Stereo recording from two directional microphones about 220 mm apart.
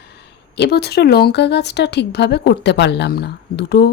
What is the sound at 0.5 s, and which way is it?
Speech, 50° left (ahead or behind).